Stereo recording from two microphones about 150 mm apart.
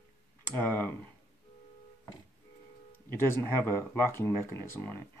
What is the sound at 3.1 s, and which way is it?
Speech, 15° left (ahead or behind).